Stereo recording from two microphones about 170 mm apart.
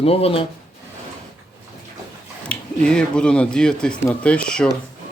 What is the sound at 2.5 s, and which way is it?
Speech, 5° left (ahead or behind).